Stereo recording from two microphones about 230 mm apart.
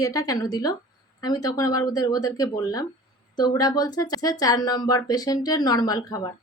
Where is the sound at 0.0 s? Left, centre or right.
Centre.